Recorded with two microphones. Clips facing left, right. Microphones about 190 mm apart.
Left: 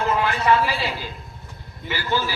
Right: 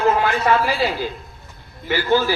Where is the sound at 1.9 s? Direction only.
45° right (ahead or behind).